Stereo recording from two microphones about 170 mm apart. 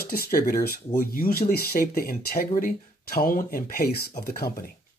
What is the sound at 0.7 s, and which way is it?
Speech, 55° left (ahead or behind).